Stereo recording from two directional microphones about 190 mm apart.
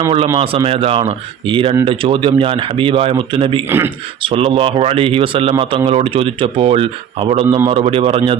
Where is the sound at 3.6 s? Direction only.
10° right (ahead or behind).